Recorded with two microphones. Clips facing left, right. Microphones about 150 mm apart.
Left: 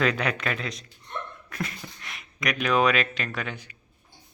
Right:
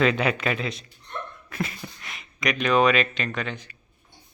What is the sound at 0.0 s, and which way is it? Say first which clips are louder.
Speech: right 3 dB; 5° right (ahead or behind).